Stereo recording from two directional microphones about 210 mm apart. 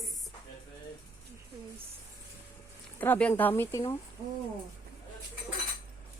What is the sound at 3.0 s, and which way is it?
A woman's voice, 5° left (ahead or behind).